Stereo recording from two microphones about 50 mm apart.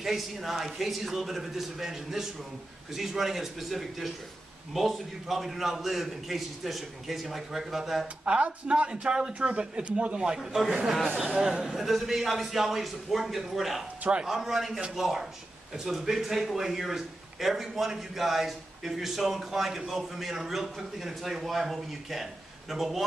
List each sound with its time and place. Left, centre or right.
0.0 s a man's voice: centre
8.3 s a man's voice: right
11.8 s a man's voice: centre